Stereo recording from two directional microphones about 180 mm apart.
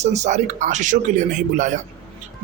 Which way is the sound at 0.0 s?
40° right (ahead or behind).